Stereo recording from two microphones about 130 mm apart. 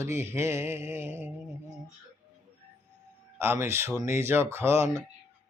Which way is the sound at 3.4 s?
20° right (ahead or behind).